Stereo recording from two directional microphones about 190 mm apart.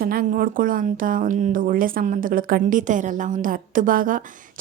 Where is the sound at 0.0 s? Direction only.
50° right (ahead or behind).